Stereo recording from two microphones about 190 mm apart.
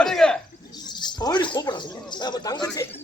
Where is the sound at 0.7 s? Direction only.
20° left (ahead or behind).